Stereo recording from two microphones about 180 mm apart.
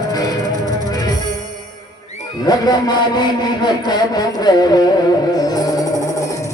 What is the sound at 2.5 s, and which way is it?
A man's voice, 20° left (ahead or behind).